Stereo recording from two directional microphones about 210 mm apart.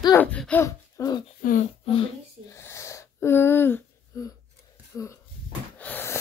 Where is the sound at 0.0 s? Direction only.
10° left (ahead or behind).